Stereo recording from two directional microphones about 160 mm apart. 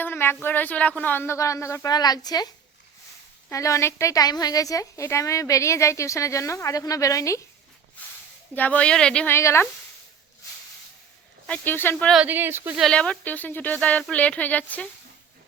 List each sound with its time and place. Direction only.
0.0 s a sound: 15° left (ahead or behind)
0.4 s speech: 10° left (ahead or behind)
3.5 s a woman's voice: 20° left (ahead or behind)
8.5 s speech: 10° left (ahead or behind)
11.4 s speech: 10° left (ahead or behind)
12.1 s speech: 10° right (ahead or behind)
12.8 s speech: 5° left (ahead or behind)